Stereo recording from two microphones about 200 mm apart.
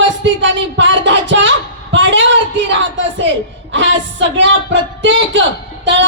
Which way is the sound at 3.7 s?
65° right (ahead or behind).